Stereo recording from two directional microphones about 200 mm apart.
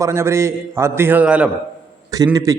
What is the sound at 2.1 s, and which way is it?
Speech, 15° right (ahead or behind).